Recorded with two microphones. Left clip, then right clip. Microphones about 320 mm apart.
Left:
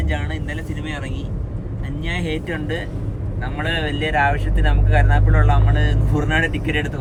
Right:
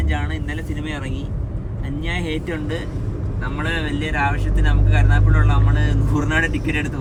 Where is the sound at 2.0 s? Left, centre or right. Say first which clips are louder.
Even; centre.